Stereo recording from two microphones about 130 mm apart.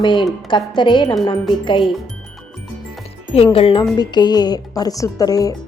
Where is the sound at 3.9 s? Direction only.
35° left (ahead or behind).